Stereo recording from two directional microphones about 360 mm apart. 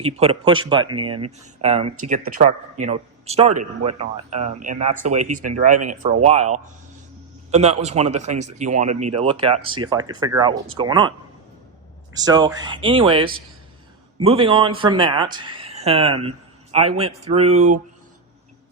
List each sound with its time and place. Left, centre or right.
0.0 s speech: centre
12.1 s speech: centre